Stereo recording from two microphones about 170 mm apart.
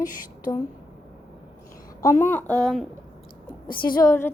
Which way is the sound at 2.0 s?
15° left (ahead or behind).